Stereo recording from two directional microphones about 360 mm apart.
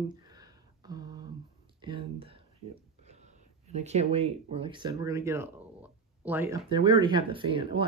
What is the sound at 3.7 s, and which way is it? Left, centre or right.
Speech, centre.